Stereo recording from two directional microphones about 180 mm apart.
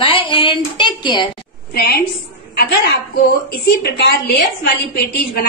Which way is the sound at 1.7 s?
60° left (ahead or behind).